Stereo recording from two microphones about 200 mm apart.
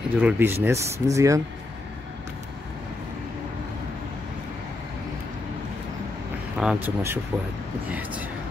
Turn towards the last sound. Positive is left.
turn(degrees=-10)  # may be behind; listen again after turning